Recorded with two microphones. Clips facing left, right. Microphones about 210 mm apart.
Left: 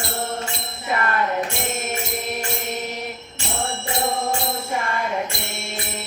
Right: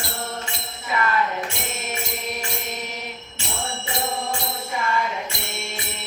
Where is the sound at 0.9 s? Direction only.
45° left (ahead or behind).